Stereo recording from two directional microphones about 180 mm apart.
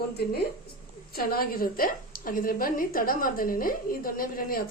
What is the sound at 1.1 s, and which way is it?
A woman's voice, 55° left (ahead or behind).